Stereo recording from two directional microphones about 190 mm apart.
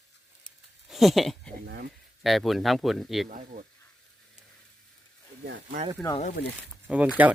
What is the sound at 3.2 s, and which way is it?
Speech, 40° right (ahead or behind).